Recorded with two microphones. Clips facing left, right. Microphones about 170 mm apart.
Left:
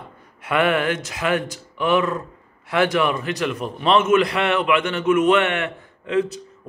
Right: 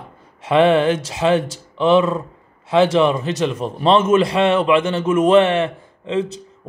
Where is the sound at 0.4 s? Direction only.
25° right (ahead or behind).